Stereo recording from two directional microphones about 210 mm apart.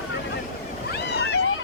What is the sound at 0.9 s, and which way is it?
Waves, 55° left (ahead or behind).